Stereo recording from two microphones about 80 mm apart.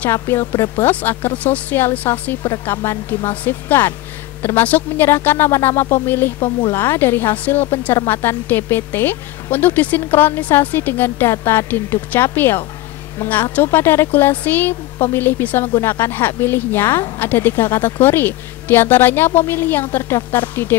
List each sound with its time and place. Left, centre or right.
0.1 s a woman's voice: left